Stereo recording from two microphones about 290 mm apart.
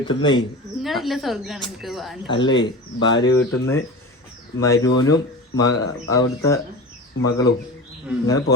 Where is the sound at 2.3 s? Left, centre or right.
Centre.